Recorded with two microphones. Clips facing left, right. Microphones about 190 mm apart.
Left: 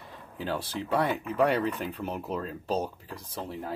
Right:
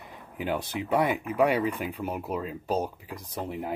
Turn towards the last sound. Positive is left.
turn(degrees=-20)  # may be behind; listen again after turning